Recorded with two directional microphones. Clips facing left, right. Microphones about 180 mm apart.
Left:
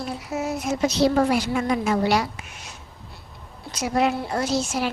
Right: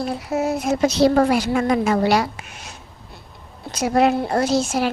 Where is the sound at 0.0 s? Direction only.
65° right (ahead or behind).